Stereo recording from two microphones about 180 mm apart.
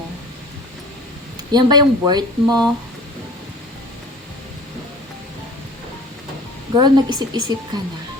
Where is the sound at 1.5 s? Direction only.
25° right (ahead or behind).